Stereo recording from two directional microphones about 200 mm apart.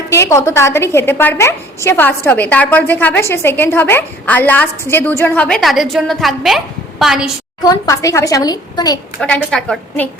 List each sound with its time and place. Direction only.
0.1 s a woman's voice: 15° left (ahead or behind); by 7.3 s centre (ahead or behind)
7.6 s a woman's voice: 20° left (ahead or behind)
9.2 s a woman's voice: 5° left (ahead or behind)